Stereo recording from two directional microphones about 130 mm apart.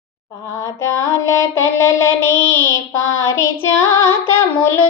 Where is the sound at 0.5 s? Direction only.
25° left (ahead or behind).